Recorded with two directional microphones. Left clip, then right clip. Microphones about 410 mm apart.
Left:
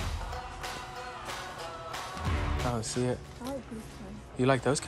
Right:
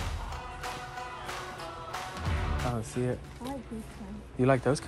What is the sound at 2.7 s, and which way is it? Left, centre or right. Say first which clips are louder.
Speech: left 1 dB; centre.